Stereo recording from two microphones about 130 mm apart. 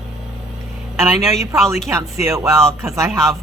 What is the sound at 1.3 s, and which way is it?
Speech, 25° right (ahead or behind).